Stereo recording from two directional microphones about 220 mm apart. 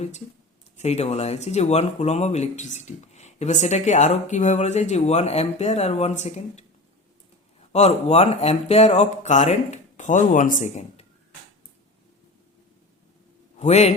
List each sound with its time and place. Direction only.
0.8 s speech: 30° left (ahead or behind)
7.7 s speech: 30° left (ahead or behind)
13.6 s a man's voice: 30° left (ahead or behind)